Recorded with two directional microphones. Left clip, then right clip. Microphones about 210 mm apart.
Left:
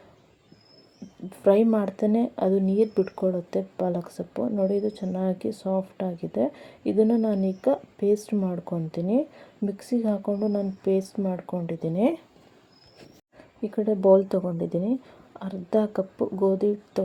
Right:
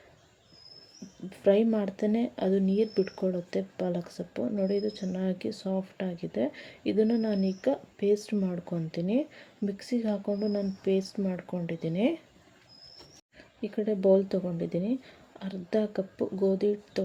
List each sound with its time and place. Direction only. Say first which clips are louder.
1.5 s speech: left 5 dB; 15° left (ahead or behind)
13.7 s speech: left 5 dB; centre (ahead or behind)
14.6 s speech: left 4 dB; 20° left (ahead or behind)
15.4 s speech: left 5 dB; centre (ahead or behind)
16.0 s speech: left 4 dB; 20° left (ahead or behind)